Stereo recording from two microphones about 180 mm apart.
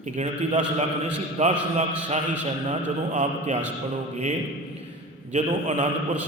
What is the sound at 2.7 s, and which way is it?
Speech, 40° right (ahead or behind).